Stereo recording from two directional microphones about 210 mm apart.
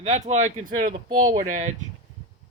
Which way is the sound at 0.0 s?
35° right (ahead or behind).